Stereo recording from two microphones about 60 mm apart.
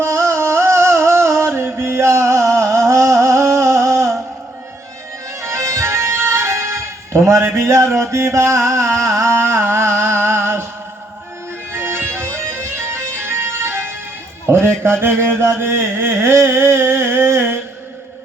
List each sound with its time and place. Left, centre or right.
0.0 s music: right
5.4 s music: right
11.7 s music: right
14.4 s a sound: right